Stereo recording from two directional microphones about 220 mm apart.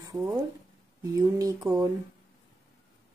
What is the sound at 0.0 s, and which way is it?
Speech, 15° right (ahead or behind).